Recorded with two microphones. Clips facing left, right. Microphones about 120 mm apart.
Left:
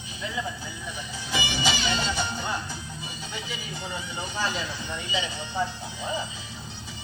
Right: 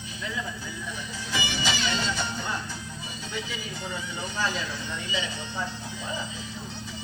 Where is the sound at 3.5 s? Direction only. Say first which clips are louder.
Even; 15° left (ahead or behind).